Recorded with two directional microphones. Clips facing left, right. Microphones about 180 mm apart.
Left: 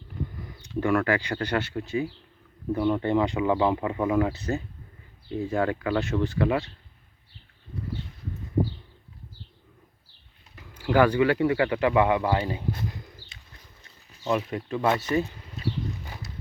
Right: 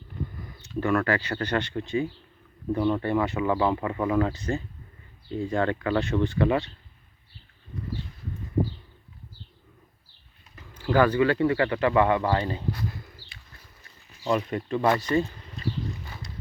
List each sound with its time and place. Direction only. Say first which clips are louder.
0.3 s speech: left 2 dB; 15° left (ahead or behind)
10.5 s speech: left 1 dB; 10° left (ahead or behind)
12.7 s pigeon: even; 20° left (ahead or behind)
14.3 s speech: right 1 dB; 5° left (ahead or behind)